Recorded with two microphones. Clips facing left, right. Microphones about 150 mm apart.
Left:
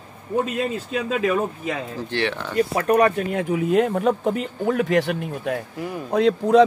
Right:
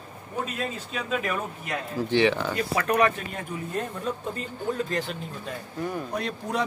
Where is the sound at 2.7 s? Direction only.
40° left (ahead or behind).